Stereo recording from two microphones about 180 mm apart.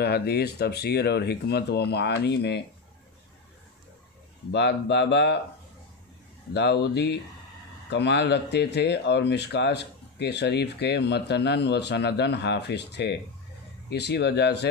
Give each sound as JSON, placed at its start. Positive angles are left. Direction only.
{"t": 0.0, "sound": "speech", "side_deg": 65}
{"t": 4.5, "sound": "speech", "side_deg": 70}
{"t": 6.5, "sound": "speech", "side_deg": 70}